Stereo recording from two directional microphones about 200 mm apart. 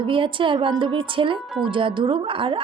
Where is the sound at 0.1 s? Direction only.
25° right (ahead or behind).